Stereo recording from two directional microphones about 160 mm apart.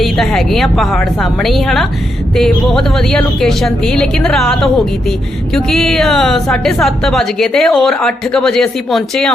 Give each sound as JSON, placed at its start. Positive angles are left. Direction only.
{"t": 0.0, "sound": "a woman's voice", "side_deg": 0}